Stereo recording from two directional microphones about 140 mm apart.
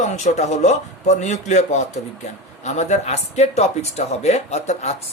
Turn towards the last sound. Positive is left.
turn(degrees=55)  # may be behind; listen again after turning